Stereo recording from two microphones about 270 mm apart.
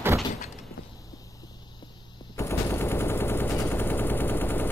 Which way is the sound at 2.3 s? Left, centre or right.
Centre.